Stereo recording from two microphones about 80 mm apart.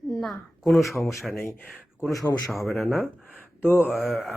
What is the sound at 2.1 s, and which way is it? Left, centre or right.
Speech, left.